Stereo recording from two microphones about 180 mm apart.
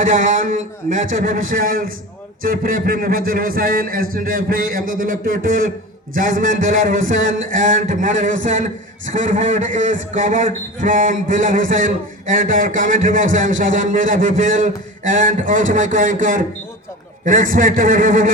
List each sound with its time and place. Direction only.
1.2 s a man's voice: 50° right (ahead or behind)